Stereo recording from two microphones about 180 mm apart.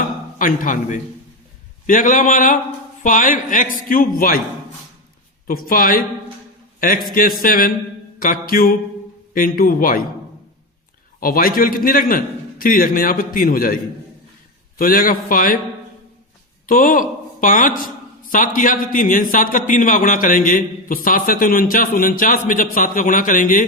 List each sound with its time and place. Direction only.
0.3 s a man's voice: 50° left (ahead or behind)
5.5 s a man's voice: 50° left (ahead or behind)
11.2 s a man's voice: 50° left (ahead or behind)
14.8 s a man's voice: 50° left (ahead or behind)
16.6 s a man's voice: 50° left (ahead or behind)